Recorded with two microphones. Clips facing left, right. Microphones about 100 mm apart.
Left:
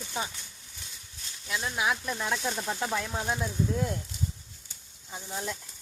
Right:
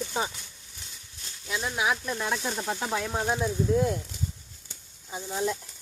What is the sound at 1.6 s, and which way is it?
Speech, 5° right (ahead or behind).